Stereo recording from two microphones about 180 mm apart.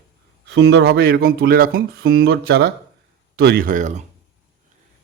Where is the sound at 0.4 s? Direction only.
85° right; by 4.0 s 45° right (ahead or behind).